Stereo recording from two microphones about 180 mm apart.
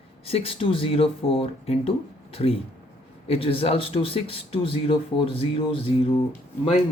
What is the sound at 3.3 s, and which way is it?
Speech, 30° left (ahead or behind).